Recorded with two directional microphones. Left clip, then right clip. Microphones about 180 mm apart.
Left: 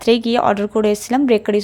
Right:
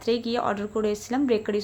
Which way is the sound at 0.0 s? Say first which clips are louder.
Left 10 dB; 50° left (ahead or behind).